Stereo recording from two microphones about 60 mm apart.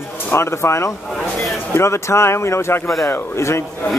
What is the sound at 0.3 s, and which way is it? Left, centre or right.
Speech, left.